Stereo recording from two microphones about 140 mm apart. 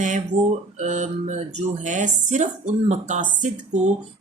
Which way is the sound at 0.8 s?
55° right (ahead or behind).